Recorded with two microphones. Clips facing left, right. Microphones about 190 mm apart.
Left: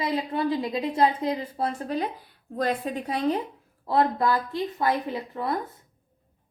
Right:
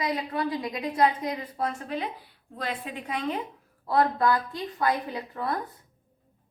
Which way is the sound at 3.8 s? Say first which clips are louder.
Left 1 dB; 25° left (ahead or behind).